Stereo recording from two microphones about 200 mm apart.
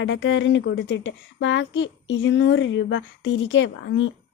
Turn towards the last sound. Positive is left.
turn(degrees=65)  # may be behind; listen again after turning